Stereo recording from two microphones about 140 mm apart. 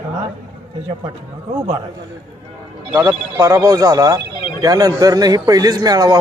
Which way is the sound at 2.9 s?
20° right (ahead or behind).